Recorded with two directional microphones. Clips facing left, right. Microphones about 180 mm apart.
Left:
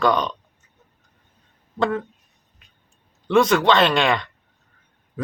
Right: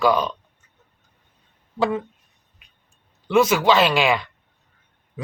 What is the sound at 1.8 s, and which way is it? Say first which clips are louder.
Speech: even; 5° right (ahead or behind).